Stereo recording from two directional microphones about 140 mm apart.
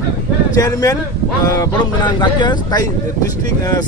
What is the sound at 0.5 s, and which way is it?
Speech, 25° left (ahead or behind).